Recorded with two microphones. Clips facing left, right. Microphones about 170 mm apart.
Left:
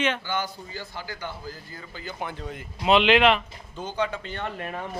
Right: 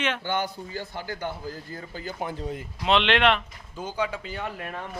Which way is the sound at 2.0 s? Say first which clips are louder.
Right 2 dB; 35° right (ahead or behind).